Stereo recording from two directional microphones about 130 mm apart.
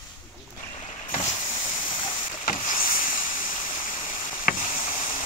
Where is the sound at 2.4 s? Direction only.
85° left.